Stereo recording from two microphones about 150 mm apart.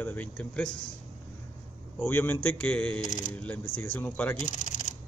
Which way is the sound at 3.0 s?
60° left (ahead or behind).